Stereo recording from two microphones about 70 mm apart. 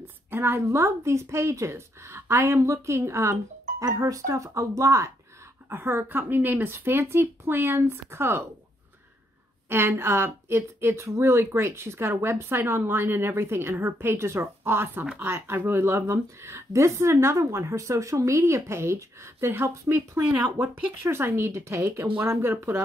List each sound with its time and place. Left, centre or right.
0.0 s a sound: right
0.7 s a woman's voice: right
3.8 s a woman's voice: right
5.7 s speech: right
9.7 s speech: right